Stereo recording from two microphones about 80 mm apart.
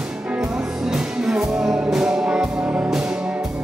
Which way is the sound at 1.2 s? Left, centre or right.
Centre.